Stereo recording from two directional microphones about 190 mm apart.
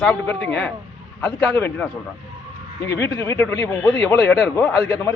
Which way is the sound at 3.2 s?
15° left (ahead or behind).